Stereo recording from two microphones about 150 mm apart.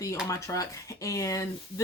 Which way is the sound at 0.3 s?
20° left (ahead or behind).